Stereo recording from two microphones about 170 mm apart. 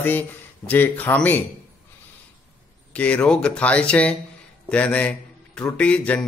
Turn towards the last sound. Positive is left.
turn(degrees=5)  # may be behind; listen again after turning